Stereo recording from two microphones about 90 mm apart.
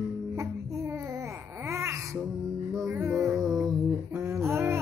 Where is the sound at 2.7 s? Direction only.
35° right (ahead or behind).